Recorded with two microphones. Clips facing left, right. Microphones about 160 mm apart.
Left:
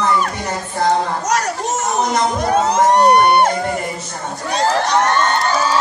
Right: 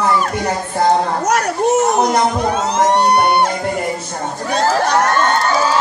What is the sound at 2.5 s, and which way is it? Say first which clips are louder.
Music: left 2 dB; 50° left (ahead or behind).